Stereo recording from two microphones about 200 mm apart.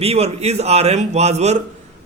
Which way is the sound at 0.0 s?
30° right (ahead or behind).